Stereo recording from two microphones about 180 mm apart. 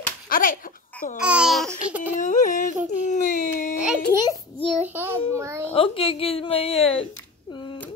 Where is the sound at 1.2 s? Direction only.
5° right (ahead or behind).